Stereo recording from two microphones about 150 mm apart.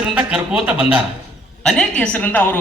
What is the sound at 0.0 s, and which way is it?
Speech, 5° right (ahead or behind).